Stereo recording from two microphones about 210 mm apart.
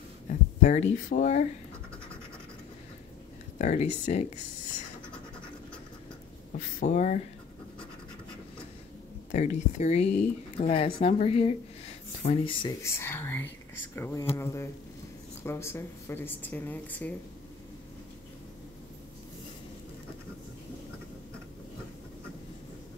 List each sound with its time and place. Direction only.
0.3 s speech: 35° left (ahead or behind)
3.5 s speech: 35° left (ahead or behind)
6.8 s speech: 35° left (ahead or behind)
9.3 s speech: 35° left (ahead or behind)
12.8 s speech: 10° left (ahead or behind)